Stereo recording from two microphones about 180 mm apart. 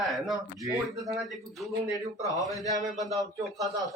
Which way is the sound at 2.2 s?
20° left (ahead or behind).